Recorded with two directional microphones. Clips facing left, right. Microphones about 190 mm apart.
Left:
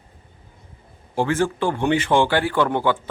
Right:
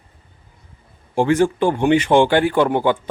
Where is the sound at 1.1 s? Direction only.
15° right (ahead or behind).